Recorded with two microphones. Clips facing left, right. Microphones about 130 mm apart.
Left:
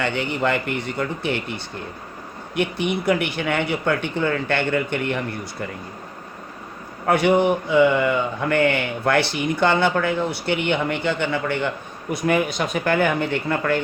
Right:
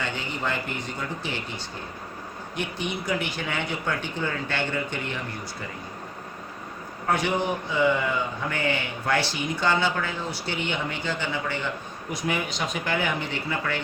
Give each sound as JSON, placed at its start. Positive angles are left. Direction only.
{"t": 0.0, "sound": "a man's voice", "side_deg": 65}
{"t": 7.1, "sound": "a man's voice", "side_deg": 60}